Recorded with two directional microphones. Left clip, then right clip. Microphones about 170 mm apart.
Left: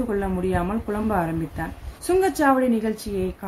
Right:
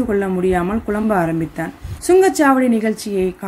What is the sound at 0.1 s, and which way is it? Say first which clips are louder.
A woman's voice: right 9 dB; 25° right (ahead or behind).